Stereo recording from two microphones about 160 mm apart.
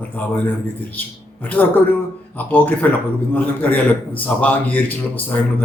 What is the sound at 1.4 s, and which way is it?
A man's voice, 10° left (ahead or behind).